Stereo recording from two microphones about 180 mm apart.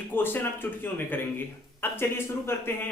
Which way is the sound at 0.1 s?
10° left (ahead or behind).